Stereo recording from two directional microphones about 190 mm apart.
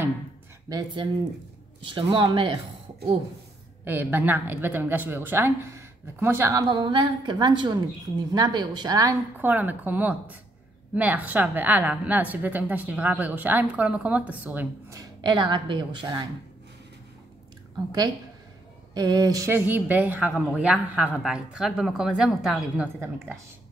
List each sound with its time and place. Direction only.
0.7 s speech: 20° right (ahead or behind)
3.8 s a woman's voice: 10° right (ahead or behind)
18.9 s a woman's voice: 20° right (ahead or behind)